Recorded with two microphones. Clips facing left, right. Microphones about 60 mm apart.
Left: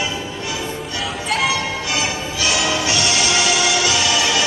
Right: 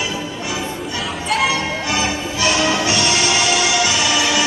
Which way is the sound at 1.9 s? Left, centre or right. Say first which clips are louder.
Right 2 dB; right.